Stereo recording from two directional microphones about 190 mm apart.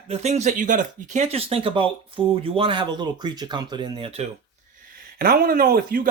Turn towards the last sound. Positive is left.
turn(degrees=-50)  # may be behind; listen again after turning